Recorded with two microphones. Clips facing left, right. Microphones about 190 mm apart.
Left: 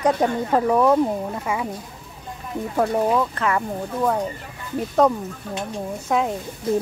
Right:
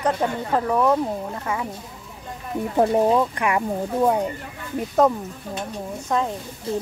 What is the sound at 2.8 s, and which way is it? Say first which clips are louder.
Speech: right 2 dB; 20° right (ahead or behind).